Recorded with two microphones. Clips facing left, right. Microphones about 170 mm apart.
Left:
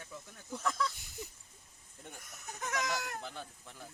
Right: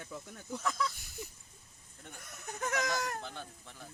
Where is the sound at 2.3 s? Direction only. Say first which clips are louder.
Right 3 dB; 40° right (ahead or behind).